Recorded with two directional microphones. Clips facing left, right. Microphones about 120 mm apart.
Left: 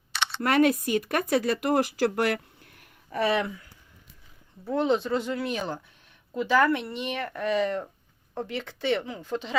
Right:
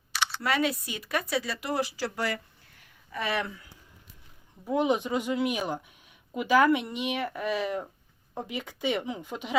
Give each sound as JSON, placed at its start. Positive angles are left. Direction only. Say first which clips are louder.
{"t": 0.3, "sound": "speech", "louder": "left 7 dB", "side_deg": 50}
{"t": 4.6, "sound": "speech", "louder": "left 1 dB", "side_deg": -10}